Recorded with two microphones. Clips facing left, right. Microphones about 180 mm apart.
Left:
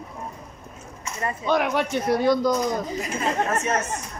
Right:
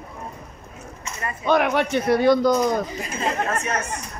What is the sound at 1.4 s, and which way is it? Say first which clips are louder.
Speech: right 3 dB; 60° right (ahead or behind).